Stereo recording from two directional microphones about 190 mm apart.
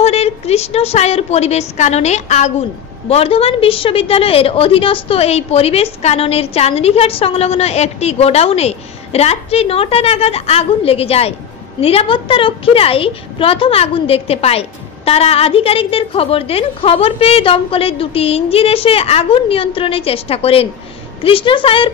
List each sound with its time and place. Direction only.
0.0 s a woman's voice: 35° left (ahead or behind)